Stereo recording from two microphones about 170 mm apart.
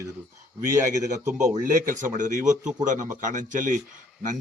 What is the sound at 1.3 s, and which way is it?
Speech, 20° right (ahead or behind).